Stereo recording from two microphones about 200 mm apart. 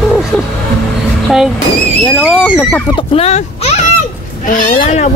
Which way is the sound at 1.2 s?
Centre (ahead or behind).